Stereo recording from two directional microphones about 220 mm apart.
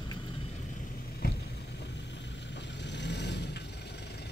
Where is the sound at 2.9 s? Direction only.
50° left (ahead or behind).